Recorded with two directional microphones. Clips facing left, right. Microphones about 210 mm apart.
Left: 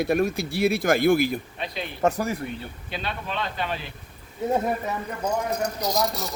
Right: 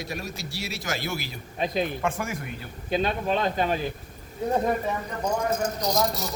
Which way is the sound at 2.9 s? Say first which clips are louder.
Right 7 dB; 45° right (ahead or behind).